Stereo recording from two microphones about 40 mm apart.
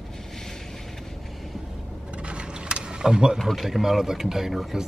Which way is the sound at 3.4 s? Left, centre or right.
Centre.